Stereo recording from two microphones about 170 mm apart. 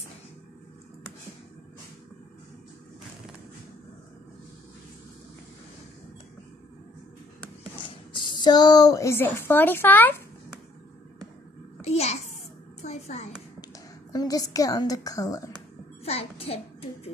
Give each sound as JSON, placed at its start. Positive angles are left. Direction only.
{"t": 7.8, "sound": "speech", "side_deg": 30}
{"t": 11.8, "sound": "a sound", "side_deg": 40}
{"t": 14.1, "sound": "a woman's voice", "side_deg": 20}
{"t": 16.0, "sound": "a child's voice", "side_deg": 35}